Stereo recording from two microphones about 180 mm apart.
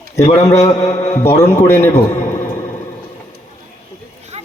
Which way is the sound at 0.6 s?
15° left (ahead or behind).